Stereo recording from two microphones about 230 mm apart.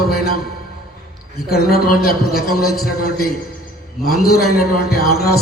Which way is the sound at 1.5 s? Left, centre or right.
Left.